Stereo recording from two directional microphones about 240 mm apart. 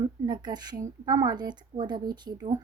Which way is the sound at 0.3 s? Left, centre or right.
Centre.